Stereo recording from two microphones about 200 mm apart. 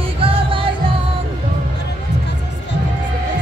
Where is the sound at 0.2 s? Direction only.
25° right (ahead or behind).